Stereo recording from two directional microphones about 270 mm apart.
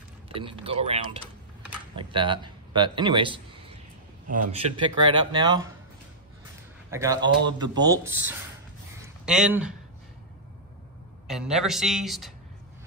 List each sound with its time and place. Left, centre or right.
0.3 s speech: centre
6.9 s a man's voice: centre
8.9 s a sound: centre
11.2 s speech: centre